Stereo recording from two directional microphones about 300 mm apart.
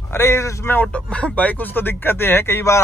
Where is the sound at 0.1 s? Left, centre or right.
Centre.